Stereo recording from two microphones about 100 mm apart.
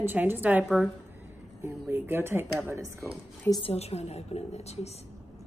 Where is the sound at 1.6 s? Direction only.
30° right (ahead or behind).